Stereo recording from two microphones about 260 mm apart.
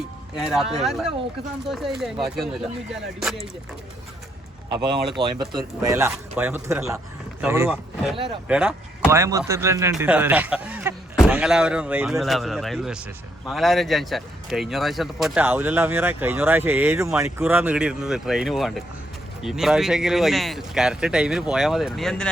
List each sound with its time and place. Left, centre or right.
0.3 s speech: centre
4.7 s speech: centre
8.4 s speech: centre